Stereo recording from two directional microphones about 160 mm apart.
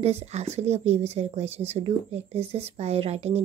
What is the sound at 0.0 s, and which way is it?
A woman's voice, 40° right (ahead or behind).